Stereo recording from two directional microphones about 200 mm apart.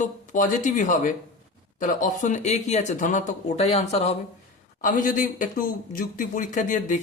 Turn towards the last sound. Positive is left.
turn(degrees=40)  # may be behind; listen again after turning